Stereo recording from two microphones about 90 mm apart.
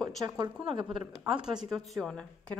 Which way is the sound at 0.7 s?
70° right (ahead or behind).